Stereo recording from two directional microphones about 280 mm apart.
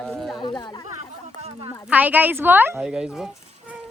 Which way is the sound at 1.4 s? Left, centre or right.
Centre.